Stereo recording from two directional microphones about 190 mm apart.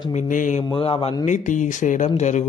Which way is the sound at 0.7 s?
25° left (ahead or behind).